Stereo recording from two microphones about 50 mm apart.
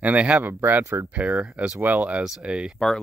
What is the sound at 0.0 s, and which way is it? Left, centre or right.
Speech, right.